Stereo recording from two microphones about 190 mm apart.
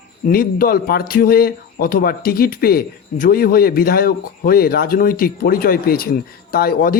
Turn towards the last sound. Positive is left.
turn(degrees=50)  # may be behind; listen again after turning